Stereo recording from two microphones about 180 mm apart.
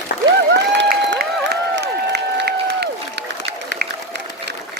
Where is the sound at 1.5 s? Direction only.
70° right (ahead or behind).